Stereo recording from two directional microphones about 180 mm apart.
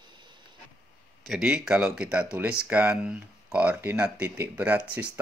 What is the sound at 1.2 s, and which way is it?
Speech, 5° right (ahead or behind).